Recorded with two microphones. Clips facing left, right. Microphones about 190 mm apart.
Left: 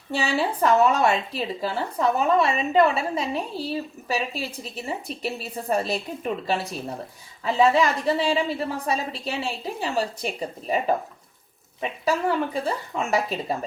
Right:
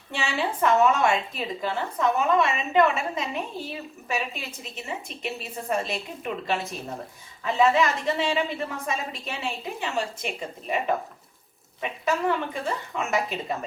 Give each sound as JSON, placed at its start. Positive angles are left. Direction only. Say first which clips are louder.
{"t": 0.1, "sound": "a woman's voice", "louder": "left 4 dB", "side_deg": 35}